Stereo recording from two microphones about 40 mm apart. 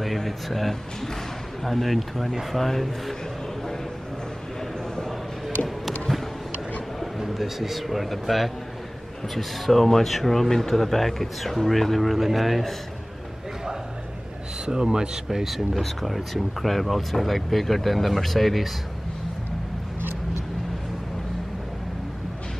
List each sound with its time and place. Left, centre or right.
0.0 s speech: centre
7.2 s speech: centre
14.7 s speech: centre
15.2 s speech: centre